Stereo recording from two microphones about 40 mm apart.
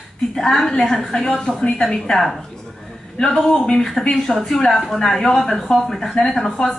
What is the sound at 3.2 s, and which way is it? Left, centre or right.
A woman's voice, centre.